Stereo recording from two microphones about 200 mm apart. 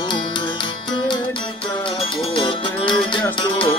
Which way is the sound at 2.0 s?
25° left (ahead or behind).